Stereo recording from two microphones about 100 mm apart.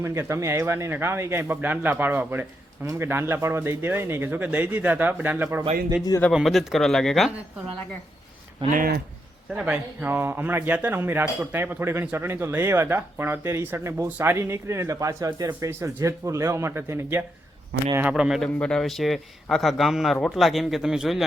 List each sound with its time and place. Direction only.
0.0 s speech: 25° right (ahead or behind)
6.3 s a man's voice: centre (ahead or behind)
9.5 s speech: 10° right (ahead or behind)
18.1 s a man's voice: centre (ahead or behind)